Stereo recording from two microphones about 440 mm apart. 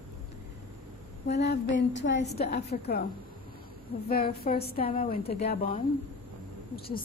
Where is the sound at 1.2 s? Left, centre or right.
Left.